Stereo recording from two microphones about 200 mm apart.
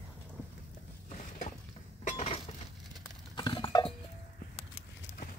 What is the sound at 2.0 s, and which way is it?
Chink, 35° left (ahead or behind).